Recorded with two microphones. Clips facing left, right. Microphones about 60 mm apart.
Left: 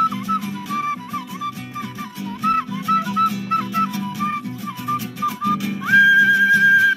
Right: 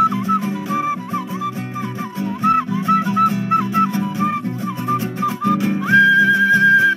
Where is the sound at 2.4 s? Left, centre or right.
Centre.